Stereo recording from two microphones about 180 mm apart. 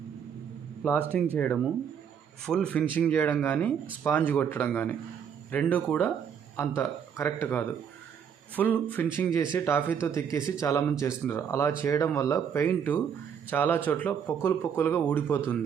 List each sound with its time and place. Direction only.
0.9 s speech: 10° left (ahead or behind)